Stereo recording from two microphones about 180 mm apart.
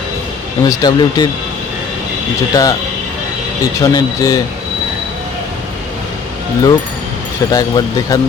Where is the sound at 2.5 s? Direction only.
20° left (ahead or behind).